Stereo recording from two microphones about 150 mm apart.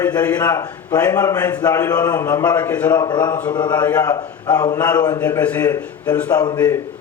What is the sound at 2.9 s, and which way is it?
A man's voice, 30° left (ahead or behind).